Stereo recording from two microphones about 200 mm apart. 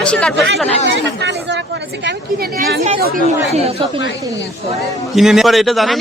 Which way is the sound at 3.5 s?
30° right (ahead or behind).